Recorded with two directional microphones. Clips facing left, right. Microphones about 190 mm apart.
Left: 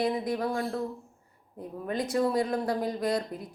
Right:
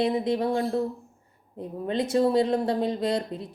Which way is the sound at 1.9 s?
25° right (ahead or behind).